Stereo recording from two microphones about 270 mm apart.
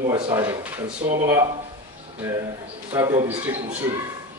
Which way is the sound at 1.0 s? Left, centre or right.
Right.